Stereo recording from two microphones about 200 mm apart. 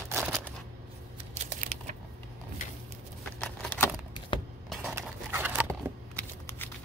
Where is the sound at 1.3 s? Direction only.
35° right (ahead or behind).